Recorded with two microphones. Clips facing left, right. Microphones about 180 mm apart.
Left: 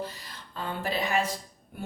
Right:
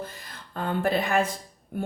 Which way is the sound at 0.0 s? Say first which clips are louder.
Left 1 dB; 55° right (ahead or behind).